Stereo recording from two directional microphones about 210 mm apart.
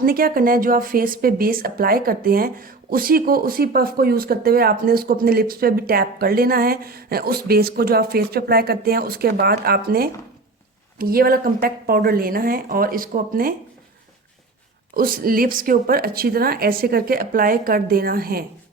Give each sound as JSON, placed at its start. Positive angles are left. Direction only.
{"t": 0.0, "sound": "speech", "side_deg": -45}
{"t": 14.9, "sound": "speech", "side_deg": -45}